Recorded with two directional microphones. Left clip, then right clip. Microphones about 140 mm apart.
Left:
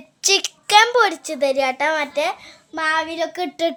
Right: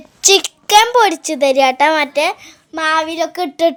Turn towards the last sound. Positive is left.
turn(degrees=-35)  # may be behind; listen again after turning